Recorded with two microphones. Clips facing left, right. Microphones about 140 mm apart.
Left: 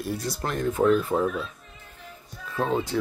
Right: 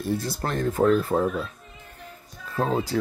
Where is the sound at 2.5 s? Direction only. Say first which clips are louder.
Right 1 dB; 40° right (ahead or behind).